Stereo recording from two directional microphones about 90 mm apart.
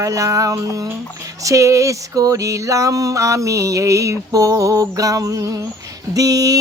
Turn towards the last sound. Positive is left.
turn(degrees=-40)  # may be behind; listen again after turning